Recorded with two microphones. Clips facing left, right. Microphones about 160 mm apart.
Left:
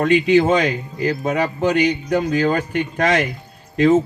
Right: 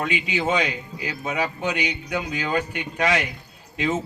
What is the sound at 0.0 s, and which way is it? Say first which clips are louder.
Speech: left 11 dB; 45° left (ahead or behind).